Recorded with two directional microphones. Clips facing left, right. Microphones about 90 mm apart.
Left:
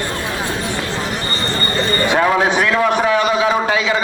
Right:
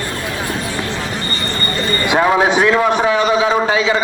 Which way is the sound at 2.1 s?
15° right (ahead or behind).